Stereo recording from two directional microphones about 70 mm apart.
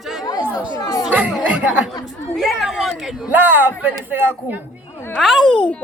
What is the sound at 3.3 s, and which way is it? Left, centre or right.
Speech, right.